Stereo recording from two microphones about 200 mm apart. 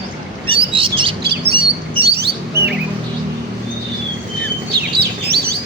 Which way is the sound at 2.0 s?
55° right (ahead or behind).